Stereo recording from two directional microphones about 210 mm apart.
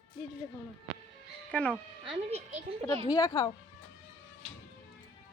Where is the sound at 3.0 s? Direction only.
20° left (ahead or behind).